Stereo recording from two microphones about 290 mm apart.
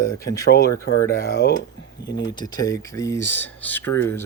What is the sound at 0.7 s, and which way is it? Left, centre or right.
Speech, centre.